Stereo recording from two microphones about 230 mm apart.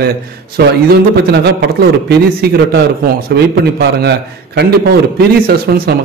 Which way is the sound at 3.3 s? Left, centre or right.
Right.